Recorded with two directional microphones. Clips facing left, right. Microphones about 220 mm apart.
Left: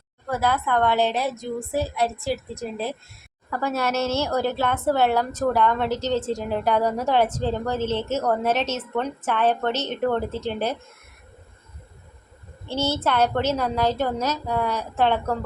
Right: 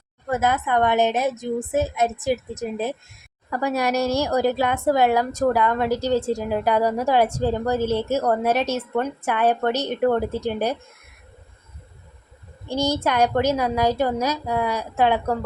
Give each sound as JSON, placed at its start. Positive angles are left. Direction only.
{"t": 0.3, "sound": "a woman's voice", "side_deg": -20}
{"t": 12.6, "sound": "a woman's voice", "side_deg": -15}